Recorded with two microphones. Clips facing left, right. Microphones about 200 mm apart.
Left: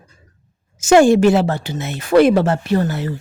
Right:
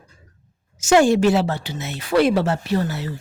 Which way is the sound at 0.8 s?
50° left (ahead or behind).